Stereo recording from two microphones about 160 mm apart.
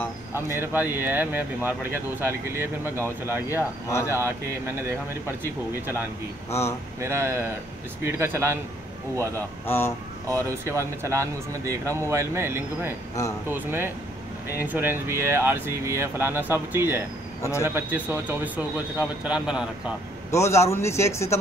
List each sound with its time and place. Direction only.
0.3 s speech: 15° right (ahead or behind)
7.0 s speech: 15° right (ahead or behind)
9.2 s a man's voice: 15° left (ahead or behind)
10.2 s speech: 20° right (ahead or behind)
17.4 s a man's voice: 20° left (ahead or behind)
17.6 s speech: 10° right (ahead or behind)
20.2 s a man's voice: 15° left (ahead or behind)